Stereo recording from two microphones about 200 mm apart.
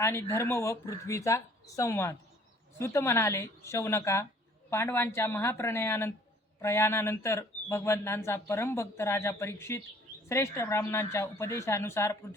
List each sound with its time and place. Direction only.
0.0 s speech: 15° left (ahead or behind)